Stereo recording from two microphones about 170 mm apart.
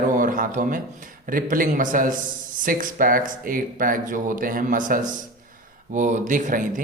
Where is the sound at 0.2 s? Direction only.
50° right (ahead or behind).